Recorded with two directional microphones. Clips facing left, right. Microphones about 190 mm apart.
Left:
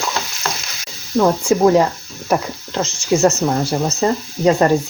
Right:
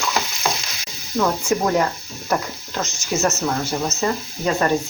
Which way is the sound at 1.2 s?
30° left (ahead or behind).